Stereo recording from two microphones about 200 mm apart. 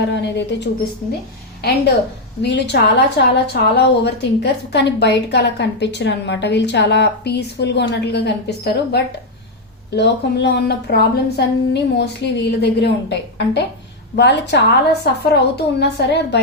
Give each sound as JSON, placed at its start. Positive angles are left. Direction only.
{"t": 0.1, "sound": "a woman's voice", "side_deg": 60}
{"t": 2.4, "sound": "a woman's voice", "side_deg": 60}